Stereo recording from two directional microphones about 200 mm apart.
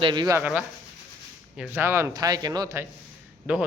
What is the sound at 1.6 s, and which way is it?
Speech, 10° right (ahead or behind).